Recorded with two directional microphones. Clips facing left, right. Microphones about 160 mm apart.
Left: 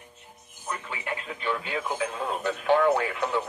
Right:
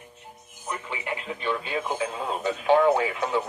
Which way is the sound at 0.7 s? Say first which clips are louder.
Right 2 dB; 20° right (ahead or behind).